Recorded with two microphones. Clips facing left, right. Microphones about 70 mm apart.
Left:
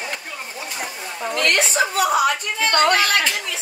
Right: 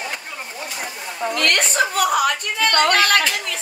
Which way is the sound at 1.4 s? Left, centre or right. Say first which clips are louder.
Left 1 dB; right.